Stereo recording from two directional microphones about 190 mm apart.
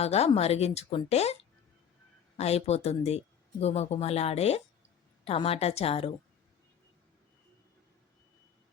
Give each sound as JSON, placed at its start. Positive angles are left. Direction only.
{"t": 0.0, "sound": "speech", "side_deg": 35}
{"t": 2.4, "sound": "speech", "side_deg": 35}